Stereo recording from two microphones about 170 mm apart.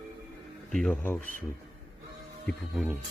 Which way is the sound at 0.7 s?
5° left (ahead or behind).